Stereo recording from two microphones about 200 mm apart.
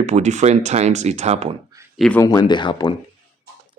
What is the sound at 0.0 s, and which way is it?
Speech, 35° right (ahead or behind).